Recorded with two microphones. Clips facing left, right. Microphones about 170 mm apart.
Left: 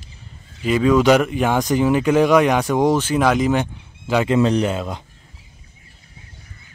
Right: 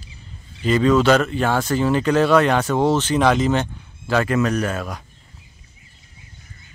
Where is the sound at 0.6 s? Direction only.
10° left (ahead or behind).